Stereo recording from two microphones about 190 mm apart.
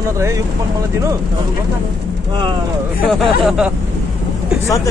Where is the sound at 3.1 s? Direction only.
5° right (ahead or behind).